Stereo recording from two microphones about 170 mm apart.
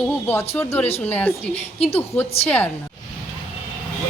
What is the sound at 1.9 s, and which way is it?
Speech, 10° left (ahead or behind).